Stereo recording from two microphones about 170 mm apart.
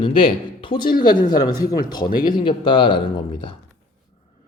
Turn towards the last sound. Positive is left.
turn(degrees=30)  # may be behind; listen again after turning